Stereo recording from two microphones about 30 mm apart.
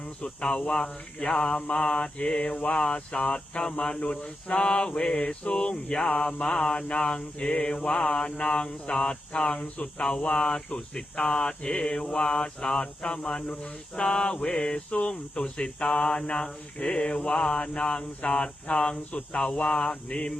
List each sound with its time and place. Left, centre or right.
0.2 s cricket: left
1.4 s mantra: left
1.8 s cricket: left
3.6 s mantra: left
4.0 s cricket: left
8.4 s cricket: left
8.6 s cricket: left
13.9 s mantra: left
14.8 s cricket: left
18.7 s mantra: left
19.3 s cricket: left